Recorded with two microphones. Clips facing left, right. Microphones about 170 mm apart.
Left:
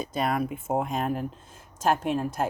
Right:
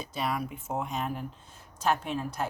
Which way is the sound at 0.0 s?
50° left (ahead or behind).